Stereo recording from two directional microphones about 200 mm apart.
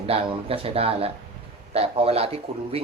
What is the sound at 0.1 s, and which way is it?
Speech, 30° right (ahead or behind).